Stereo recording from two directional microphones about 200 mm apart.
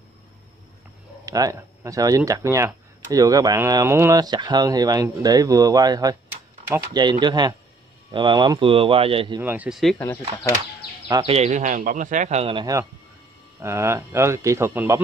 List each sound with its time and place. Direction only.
1.2 s speech: 15° right (ahead or behind)
9.4 s speech: 10° right (ahead or behind)
11.2 s speech: 30° right (ahead or behind); by 15.0 s 10° right (ahead or behind)